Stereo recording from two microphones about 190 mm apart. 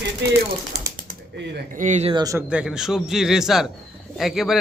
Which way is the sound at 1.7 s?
40° right (ahead or behind).